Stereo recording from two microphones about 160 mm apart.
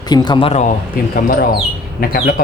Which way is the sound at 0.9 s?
65° left (ahead or behind).